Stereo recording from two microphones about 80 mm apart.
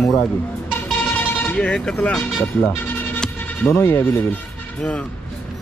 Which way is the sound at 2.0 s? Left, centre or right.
Centre.